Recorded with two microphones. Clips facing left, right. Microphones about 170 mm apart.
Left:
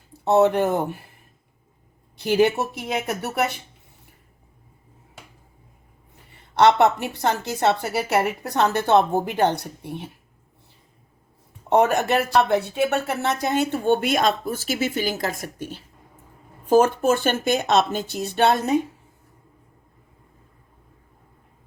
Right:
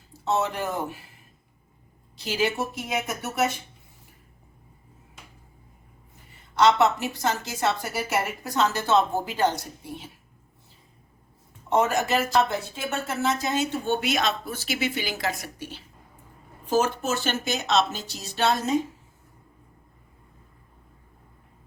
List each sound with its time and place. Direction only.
0.1 s speech: 60° left (ahead or behind)
2.1 s a woman's voice: 55° left (ahead or behind)
6.6 s a woman's voice: 60° left (ahead or behind)
11.7 s a woman's voice: 60° left (ahead or behind)